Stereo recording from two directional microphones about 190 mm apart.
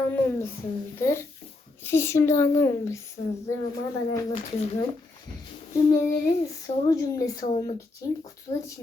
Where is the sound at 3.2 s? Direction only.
20° left (ahead or behind).